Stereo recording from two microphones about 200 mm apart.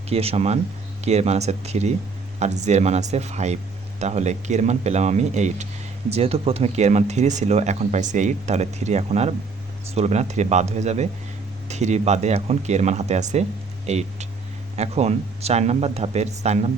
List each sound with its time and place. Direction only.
0.1 s speech: 30° right (ahead or behind)